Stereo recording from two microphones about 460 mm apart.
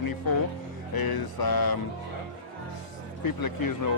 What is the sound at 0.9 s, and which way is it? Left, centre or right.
Speech, left.